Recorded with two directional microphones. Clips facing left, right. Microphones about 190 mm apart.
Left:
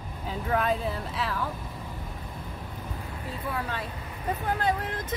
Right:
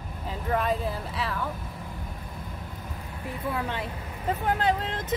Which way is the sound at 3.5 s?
20° right (ahead or behind).